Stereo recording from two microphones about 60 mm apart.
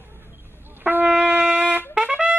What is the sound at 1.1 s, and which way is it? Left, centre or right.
Brass instrument, centre.